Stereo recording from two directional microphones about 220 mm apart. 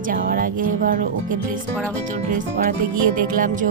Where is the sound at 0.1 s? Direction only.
40° right (ahead or behind).